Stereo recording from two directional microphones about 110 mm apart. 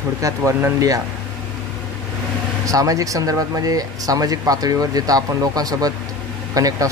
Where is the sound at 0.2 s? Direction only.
25° right (ahead or behind).